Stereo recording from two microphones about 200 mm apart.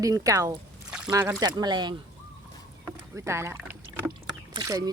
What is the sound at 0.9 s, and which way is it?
Pour, 10° right (ahead or behind).